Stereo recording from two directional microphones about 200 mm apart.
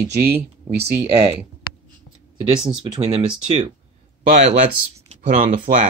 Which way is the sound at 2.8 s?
30° right (ahead or behind).